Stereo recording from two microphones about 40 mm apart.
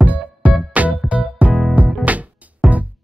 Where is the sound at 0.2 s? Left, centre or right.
Right.